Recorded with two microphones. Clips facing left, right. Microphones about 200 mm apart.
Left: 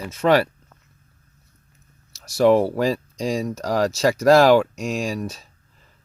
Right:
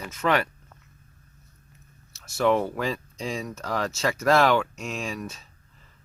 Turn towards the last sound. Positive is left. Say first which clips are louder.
# left 7 dB
turn(degrees=35)  # may be behind; listen again after turning